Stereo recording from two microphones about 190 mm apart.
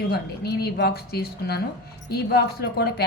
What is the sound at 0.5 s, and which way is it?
Speech, 55° left (ahead or behind).